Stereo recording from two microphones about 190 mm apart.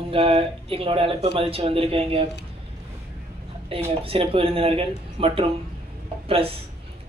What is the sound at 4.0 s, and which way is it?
Speech, 30° right (ahead or behind).